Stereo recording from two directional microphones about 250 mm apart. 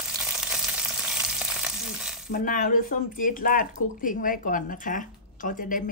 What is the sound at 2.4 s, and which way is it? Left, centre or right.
Speech, left.